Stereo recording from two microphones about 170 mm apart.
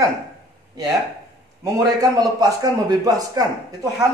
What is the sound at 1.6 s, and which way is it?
A man's voice, 20° right (ahead or behind).